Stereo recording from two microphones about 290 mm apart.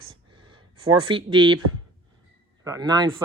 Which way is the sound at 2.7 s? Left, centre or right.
Centre.